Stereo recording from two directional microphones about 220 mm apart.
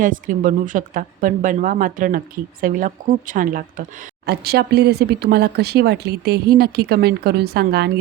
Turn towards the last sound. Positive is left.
turn(degrees=-45)  # may be behind; listen again after turning